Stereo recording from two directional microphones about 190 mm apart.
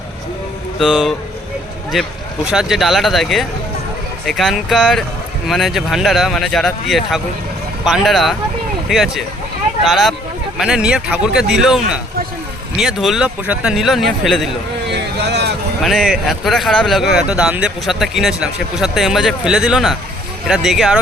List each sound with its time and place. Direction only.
0.8 s speech: centre (ahead or behind)
14.9 s a sound: 60° right (ahead or behind)
15.8 s speech: centre (ahead or behind)